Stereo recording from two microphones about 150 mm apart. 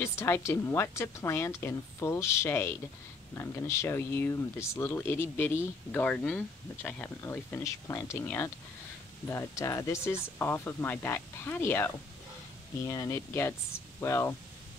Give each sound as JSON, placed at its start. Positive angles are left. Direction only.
{"t": 0.0, "sound": "a woman's voice", "side_deg": 15}